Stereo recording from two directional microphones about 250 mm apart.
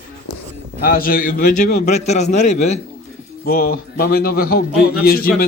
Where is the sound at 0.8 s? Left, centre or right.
Left.